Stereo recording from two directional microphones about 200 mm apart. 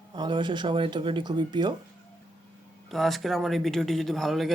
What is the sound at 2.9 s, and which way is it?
Speech, centre (ahead or behind).